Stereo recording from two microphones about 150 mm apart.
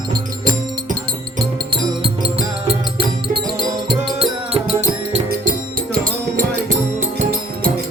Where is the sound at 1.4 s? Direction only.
35° right (ahead or behind).